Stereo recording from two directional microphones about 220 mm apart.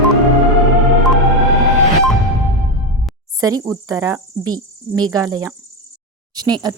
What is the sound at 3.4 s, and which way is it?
Speech, 15° right (ahead or behind).